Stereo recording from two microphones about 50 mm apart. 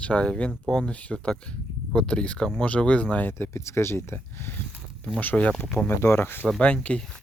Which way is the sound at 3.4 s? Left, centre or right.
Left.